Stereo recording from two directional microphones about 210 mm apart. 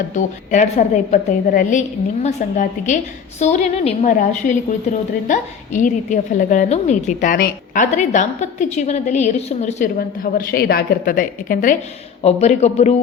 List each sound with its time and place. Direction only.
0.1 s a woman's voice: 35° left (ahead or behind)
10.3 s a woman's voice: 45° left (ahead or behind)